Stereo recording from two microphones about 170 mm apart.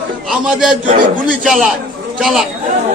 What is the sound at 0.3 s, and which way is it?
Speech, 5° right (ahead or behind).